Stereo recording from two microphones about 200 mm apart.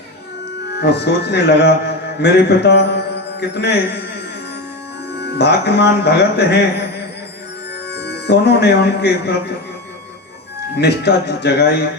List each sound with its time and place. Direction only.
0.8 s speech: 55° left (ahead or behind)
5.2 s speech: 55° left (ahead or behind)
7.9 s speech: 55° left (ahead or behind)
10.8 s speech: 55° left (ahead or behind)